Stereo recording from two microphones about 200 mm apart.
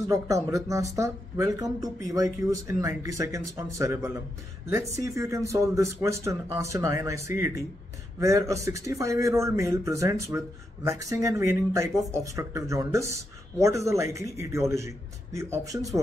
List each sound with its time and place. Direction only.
0.1 s speech: 15° right (ahead or behind)